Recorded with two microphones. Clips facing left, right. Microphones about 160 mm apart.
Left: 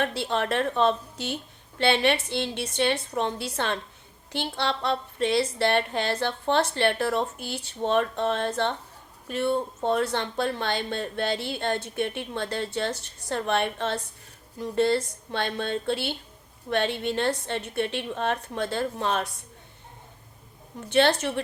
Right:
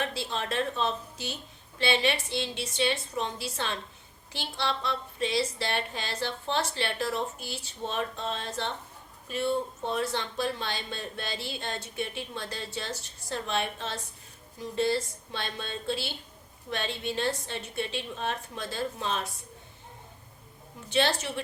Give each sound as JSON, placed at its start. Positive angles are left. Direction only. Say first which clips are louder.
{"t": 0.0, "sound": "speech", "louder": "left 6 dB", "side_deg": 60}
{"t": 20.9, "sound": "speech", "louder": "left 6 dB", "side_deg": 55}